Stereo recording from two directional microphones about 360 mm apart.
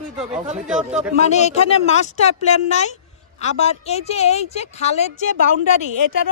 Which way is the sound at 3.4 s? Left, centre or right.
Centre.